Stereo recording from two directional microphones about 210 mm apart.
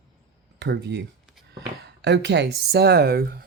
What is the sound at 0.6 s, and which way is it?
Speech, 55° right (ahead or behind).